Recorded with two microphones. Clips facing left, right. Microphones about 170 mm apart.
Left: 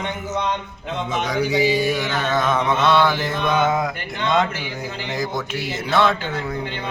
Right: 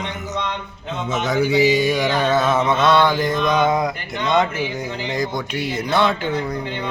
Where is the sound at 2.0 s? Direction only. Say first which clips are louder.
Right 4 dB; 15° right (ahead or behind).